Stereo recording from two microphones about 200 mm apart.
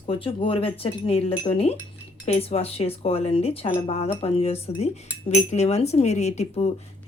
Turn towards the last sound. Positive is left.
turn(degrees=30)  # may be behind; listen again after turning